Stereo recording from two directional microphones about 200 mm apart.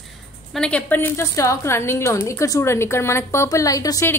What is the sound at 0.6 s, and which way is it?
A woman's voice, 5° left (ahead or behind).